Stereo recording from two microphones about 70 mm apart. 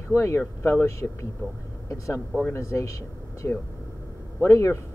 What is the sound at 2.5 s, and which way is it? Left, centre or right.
Speech, left.